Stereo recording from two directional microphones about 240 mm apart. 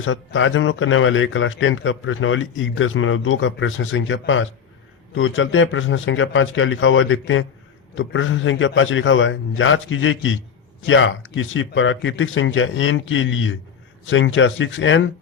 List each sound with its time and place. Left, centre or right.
0.0 s a man's voice: left